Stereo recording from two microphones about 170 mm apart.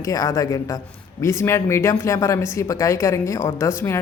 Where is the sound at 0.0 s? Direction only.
20° left (ahead or behind).